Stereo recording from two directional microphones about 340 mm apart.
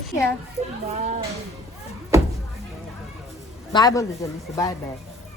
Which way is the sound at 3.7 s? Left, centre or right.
Centre.